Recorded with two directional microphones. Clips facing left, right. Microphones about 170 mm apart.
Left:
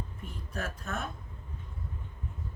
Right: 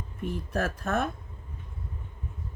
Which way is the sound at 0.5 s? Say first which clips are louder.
Right 8 dB; 60° right (ahead or behind).